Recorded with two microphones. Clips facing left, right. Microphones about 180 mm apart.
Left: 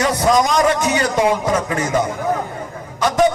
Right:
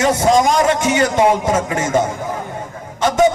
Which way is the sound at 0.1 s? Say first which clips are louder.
Right 2 dB; 25° right (ahead or behind).